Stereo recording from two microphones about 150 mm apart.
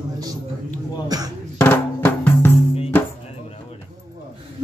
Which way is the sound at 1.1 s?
25° right (ahead or behind).